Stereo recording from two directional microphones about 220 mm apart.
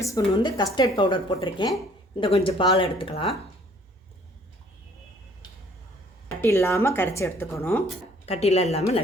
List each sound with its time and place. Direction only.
0.0 s speech: 15° left (ahead or behind)
6.2 s speech: 10° left (ahead or behind)
8.3 s speech: 30° left (ahead or behind)